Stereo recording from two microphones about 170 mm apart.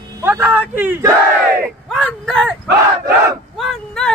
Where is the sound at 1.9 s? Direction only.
5° left (ahead or behind).